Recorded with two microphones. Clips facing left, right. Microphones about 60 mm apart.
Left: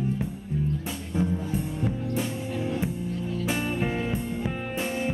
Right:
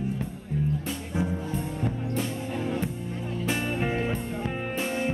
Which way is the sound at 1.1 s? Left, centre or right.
Right.